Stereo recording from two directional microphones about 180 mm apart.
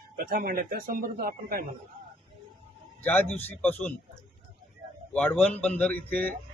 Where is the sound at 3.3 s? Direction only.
10° left (ahead or behind).